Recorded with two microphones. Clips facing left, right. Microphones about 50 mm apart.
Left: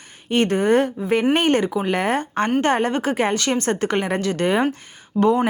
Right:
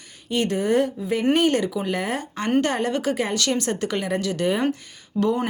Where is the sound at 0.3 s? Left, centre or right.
Left.